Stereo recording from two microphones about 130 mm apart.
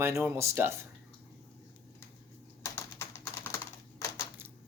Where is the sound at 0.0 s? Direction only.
20° right (ahead or behind).